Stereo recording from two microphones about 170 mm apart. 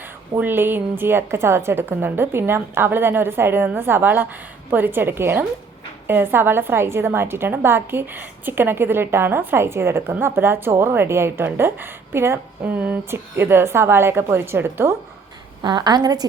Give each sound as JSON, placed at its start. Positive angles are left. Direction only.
{"t": 0.0, "sound": "a woman's voice", "side_deg": -10}
{"t": 15.6, "sound": "a woman's voice", "side_deg": -25}